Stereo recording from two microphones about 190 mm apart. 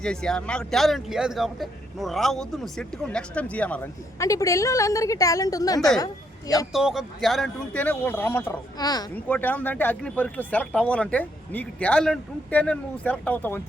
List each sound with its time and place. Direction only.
0.0 s speech: 5° left (ahead or behind); by 5.9 s 20° left (ahead or behind)
6.7 s speech: centre (ahead or behind); by 9.0 s 20° left (ahead or behind)
9.1 s speech: 10° left (ahead or behind)